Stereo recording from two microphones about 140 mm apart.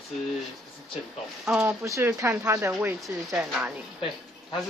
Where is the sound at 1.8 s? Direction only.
20° right (ahead or behind).